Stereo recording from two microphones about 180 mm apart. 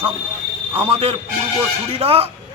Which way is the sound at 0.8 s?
35° right (ahead or behind).